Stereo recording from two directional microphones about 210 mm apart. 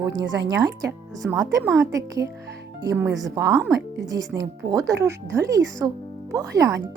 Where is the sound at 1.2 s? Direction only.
5° right (ahead or behind).